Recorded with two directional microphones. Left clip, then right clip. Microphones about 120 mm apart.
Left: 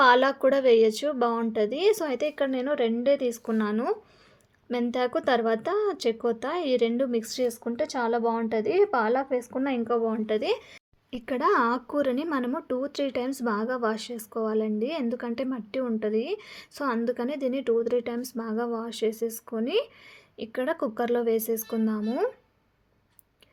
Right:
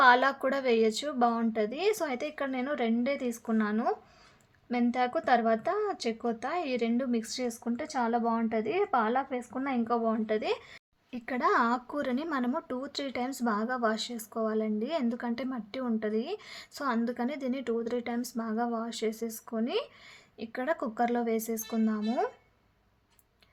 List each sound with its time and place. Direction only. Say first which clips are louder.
0.0 s a woman's voice: left 3 dB; 35° left (ahead or behind)